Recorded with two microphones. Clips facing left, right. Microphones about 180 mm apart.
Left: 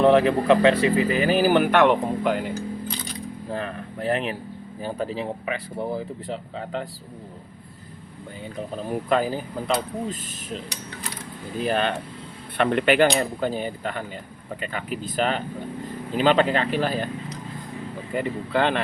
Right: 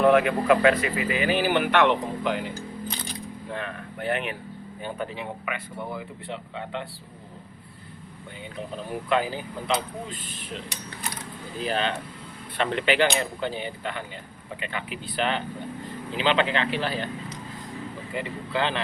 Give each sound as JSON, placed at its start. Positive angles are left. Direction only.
{"t": 0.0, "sound": "speech", "side_deg": 30}
{"t": 3.5, "sound": "speech", "side_deg": 35}
{"t": 9.0, "sound": "speech", "side_deg": 40}
{"t": 11.6, "sound": "speech", "side_deg": 55}
{"t": 18.1, "sound": "speech", "side_deg": 50}